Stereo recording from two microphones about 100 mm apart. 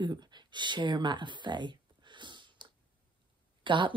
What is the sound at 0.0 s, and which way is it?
Speech, 50° right (ahead or behind).